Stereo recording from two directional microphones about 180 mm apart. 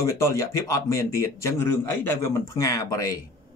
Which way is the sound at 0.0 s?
15° left (ahead or behind).